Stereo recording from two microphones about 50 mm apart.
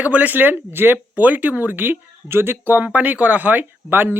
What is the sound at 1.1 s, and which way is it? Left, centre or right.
Speech, right.